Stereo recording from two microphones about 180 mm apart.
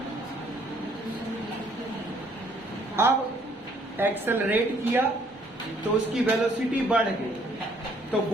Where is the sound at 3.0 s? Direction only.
15° right (ahead or behind).